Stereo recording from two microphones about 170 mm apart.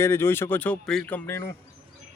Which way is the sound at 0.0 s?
15° left (ahead or behind).